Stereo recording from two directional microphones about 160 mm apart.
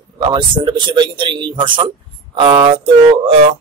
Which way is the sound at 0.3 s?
30° right (ahead or behind).